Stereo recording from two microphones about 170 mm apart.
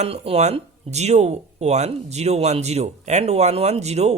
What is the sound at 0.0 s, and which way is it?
Speech, 40° right (ahead or behind).